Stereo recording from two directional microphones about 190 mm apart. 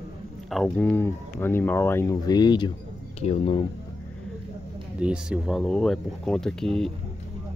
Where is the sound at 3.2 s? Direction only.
35° left (ahead or behind).